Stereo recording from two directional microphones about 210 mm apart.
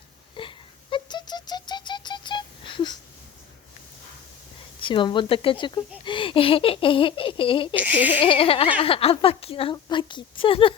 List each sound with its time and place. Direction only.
0.3 s a sound: 25° left (ahead or behind)
4.8 s a woman's voice: 25° left (ahead or behind)
7.8 s speech: 5° right (ahead or behind)
8.2 s a woman's voice: 25° left (ahead or behind)